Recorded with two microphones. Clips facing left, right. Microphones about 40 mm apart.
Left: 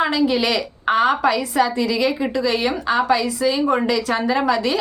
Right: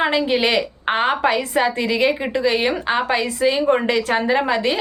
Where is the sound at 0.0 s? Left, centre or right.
Right.